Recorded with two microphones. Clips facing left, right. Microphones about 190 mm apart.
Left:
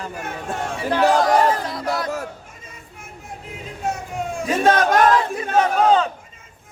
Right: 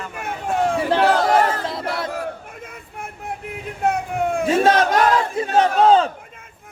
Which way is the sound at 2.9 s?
60° right (ahead or behind).